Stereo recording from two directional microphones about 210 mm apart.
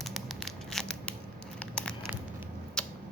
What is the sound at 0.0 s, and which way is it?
Tearing, centre (ahead or behind).